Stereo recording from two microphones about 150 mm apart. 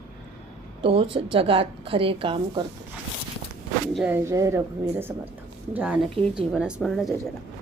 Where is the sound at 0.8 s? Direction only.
35° right (ahead or behind).